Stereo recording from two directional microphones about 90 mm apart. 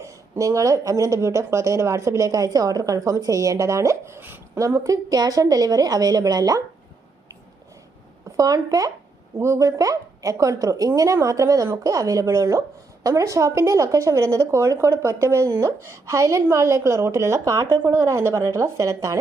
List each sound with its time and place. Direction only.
0.0 s a woman's voice: 35° right (ahead or behind)
8.4 s speech: 40° right (ahead or behind)